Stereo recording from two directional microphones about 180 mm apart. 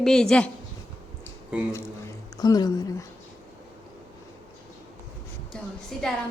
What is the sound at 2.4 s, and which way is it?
Speech, 20° left (ahead or behind).